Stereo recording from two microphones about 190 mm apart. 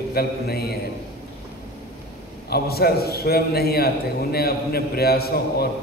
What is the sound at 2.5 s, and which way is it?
A man's voice, 55° left (ahead or behind).